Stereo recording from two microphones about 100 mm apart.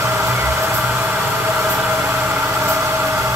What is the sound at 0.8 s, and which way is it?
Vehicle, 15° right (ahead or behind).